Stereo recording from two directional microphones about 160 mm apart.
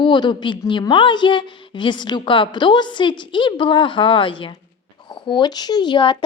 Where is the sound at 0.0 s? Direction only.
30° left (ahead or behind).